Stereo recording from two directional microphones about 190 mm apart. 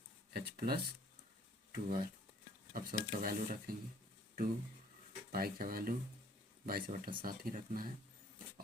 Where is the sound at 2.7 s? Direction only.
50° right (ahead or behind).